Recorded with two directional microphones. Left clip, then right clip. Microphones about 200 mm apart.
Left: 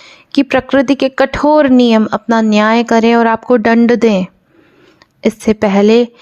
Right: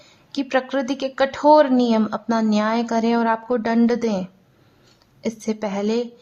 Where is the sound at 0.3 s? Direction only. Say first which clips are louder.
Left 10 dB; 40° left (ahead or behind).